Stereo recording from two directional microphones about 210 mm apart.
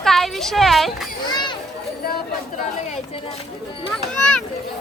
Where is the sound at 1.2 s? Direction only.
20° left (ahead or behind).